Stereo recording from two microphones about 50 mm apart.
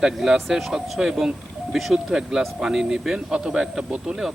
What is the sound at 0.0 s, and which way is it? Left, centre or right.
Speech, centre.